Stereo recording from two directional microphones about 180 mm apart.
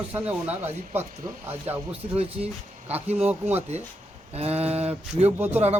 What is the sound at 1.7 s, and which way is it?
Speech, 35° right (ahead or behind).